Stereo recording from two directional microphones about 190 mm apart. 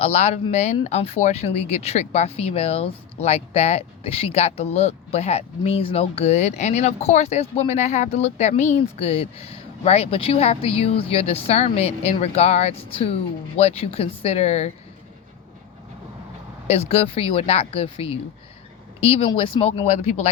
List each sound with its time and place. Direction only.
0.0 s speech: 35° left (ahead or behind)
16.6 s speech: 35° left (ahead or behind)